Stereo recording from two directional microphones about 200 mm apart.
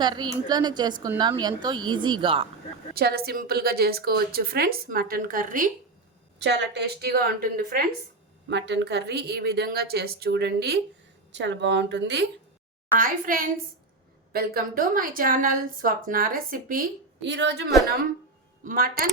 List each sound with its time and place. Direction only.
0.0 s a woman's voice: 20° right (ahead or behind)
2.9 s a woman's voice: 50° right (ahead or behind)
6.4 s a woman's voice: 60° right (ahead or behind)
8.4 s a woman's voice: 60° right (ahead or behind)
13.0 s a woman's voice: 45° right (ahead or behind)
17.2 s a woman's voice: 60° right (ahead or behind)
18.6 s a woman's voice: 45° right (ahead or behind)